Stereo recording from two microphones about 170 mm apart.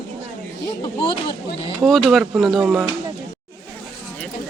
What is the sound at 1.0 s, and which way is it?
Speech, 30° left (ahead or behind).